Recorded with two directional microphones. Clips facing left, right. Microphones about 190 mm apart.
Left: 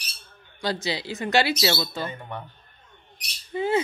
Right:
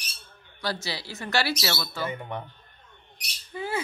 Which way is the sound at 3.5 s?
20° left (ahead or behind).